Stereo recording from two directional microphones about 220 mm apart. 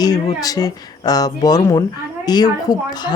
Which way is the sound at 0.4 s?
15° left (ahead or behind).